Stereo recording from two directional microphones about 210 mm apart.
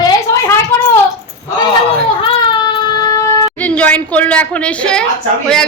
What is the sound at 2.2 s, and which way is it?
Baby cry, 25° left (ahead or behind).